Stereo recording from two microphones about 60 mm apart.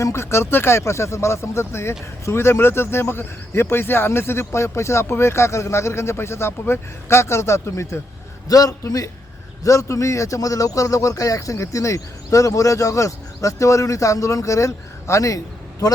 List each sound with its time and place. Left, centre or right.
0.0 s speech: left
8.4 s a man's voice: left
9.6 s speech: left